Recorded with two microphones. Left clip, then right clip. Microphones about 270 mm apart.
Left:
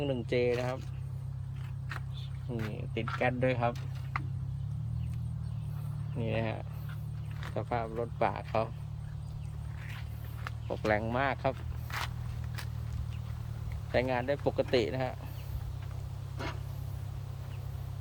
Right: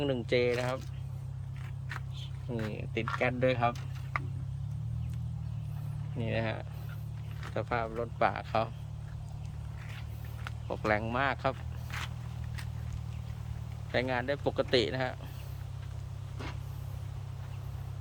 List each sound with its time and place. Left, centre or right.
0.0 s speech: centre
2.5 s speech: centre
6.1 s speech: centre
10.4 s speech: centre
11.9 s biting: centre
13.9 s speech: centre